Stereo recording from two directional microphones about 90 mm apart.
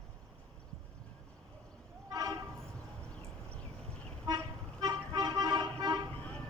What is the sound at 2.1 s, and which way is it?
Train, 45° right (ahead or behind).